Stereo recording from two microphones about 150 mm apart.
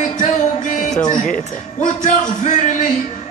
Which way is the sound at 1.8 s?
55° left (ahead or behind).